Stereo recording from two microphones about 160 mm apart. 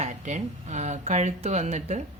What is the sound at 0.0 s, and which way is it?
Speech, 45° right (ahead or behind).